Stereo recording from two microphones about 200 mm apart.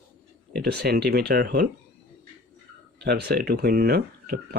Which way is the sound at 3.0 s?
55° right (ahead or behind).